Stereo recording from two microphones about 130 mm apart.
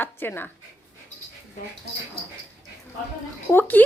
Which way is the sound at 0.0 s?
15° left (ahead or behind).